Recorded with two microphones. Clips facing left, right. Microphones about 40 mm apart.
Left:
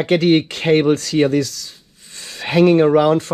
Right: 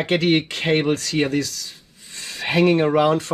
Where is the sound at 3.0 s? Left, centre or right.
Right.